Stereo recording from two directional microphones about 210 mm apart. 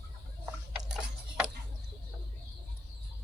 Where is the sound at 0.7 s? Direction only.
5° right (ahead or behind).